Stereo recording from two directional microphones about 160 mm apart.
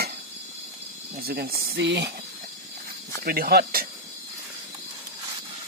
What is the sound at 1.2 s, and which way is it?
Speech, 70° right (ahead or behind).